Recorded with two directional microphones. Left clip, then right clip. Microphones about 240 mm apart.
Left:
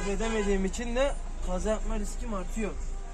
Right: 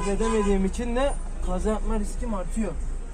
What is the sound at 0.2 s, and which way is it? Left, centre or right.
Speech, left.